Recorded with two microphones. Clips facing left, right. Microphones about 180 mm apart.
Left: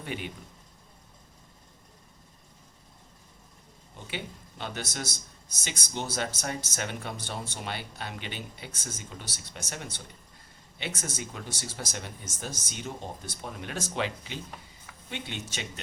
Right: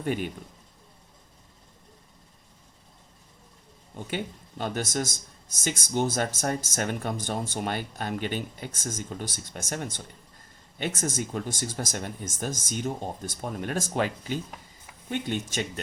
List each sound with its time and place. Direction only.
0.0 s a man's voice: 45° right (ahead or behind)
4.0 s a man's voice: 45° right (ahead or behind)